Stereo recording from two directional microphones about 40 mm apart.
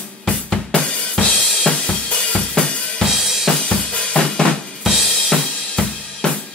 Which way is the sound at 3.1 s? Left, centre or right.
Centre.